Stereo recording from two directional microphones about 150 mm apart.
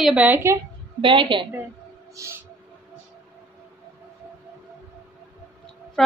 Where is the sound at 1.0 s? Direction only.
35° right (ahead or behind).